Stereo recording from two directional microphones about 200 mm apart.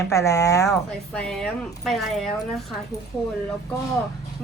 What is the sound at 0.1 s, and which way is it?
Speech, 15° left (ahead or behind).